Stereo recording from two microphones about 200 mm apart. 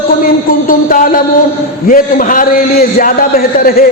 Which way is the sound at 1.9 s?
40° left (ahead or behind).